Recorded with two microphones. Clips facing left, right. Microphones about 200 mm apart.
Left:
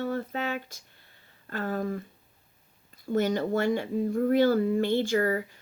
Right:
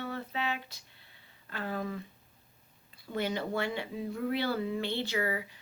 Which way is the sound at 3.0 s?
45° left (ahead or behind).